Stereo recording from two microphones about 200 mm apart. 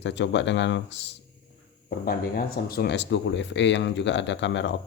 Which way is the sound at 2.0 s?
50° left (ahead or behind).